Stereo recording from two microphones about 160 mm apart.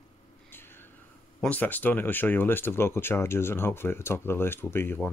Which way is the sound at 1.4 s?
10° left (ahead or behind).